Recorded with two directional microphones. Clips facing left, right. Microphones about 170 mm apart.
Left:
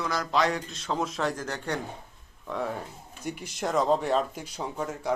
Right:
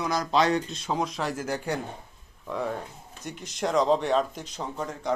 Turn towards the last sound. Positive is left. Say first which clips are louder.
# left 1 dB
turn(degrees=5)  # may be behind; listen again after turning